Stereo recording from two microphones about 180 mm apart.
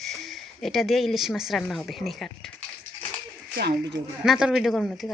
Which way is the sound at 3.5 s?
65° right (ahead or behind).